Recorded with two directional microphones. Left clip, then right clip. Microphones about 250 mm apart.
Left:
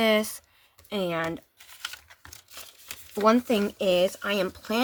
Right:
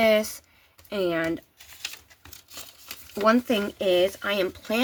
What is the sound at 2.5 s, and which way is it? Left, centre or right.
Speech, left.